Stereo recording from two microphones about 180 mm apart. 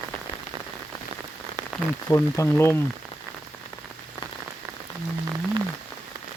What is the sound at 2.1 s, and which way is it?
Speech, 15° left (ahead or behind).